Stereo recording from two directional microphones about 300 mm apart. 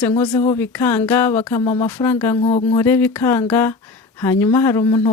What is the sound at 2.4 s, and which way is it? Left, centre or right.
Speech, centre.